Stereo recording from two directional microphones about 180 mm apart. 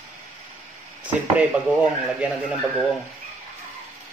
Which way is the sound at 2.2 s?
5° right (ahead or behind).